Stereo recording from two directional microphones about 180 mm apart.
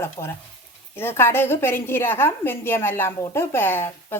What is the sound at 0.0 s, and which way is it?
A woman's voice, 15° left (ahead or behind).